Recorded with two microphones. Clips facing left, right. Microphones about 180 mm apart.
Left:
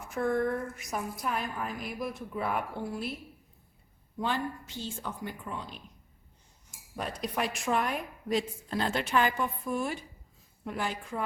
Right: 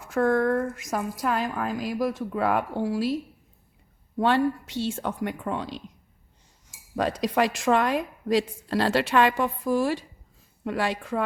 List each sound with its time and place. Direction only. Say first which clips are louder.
0.0 s speech: right 6 dB; 90° right
4.2 s a woman's voice: right 10 dB; 70° right (ahead or behind); by 10.1 s 90° right
10.6 s a woman's voice: right 7 dB; 75° right (ahead or behind)